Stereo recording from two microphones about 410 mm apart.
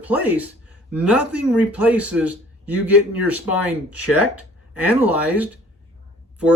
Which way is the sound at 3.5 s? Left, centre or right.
Centre.